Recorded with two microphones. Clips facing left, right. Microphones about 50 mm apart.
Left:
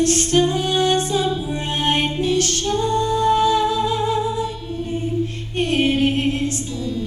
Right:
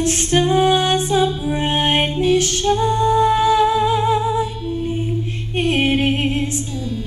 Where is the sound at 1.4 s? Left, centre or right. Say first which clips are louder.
Right 3 dB; right.